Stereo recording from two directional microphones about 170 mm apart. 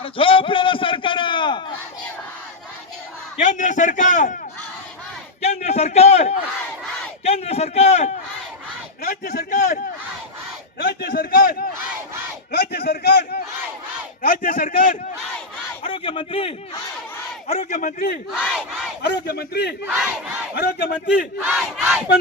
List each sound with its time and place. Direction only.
0.0 s a sound: 30° left (ahead or behind)
3.3 s a man's voice: 45° left (ahead or behind)
5.4 s a man's voice: 40° left (ahead or behind)
9.0 s a man's voice: 55° left (ahead or behind)
10.8 s a sound: 70° left (ahead or behind)
12.5 s a sound: 70° left (ahead or behind)
14.2 s a man's voice: 60° left (ahead or behind)
15.9 s a man's voice: 30° left (ahead or behind)
17.7 s a man's voice: 55° left (ahead or behind)
18.3 s battle cry: 5° right (ahead or behind)
19.0 s a man's voice: 75° left (ahead or behind)
21.4 s battle cry: 5° right (ahead or behind)